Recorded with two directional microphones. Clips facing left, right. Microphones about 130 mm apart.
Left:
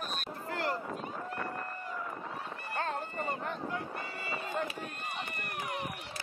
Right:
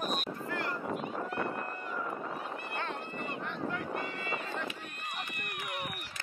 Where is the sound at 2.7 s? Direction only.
40° left (ahead or behind).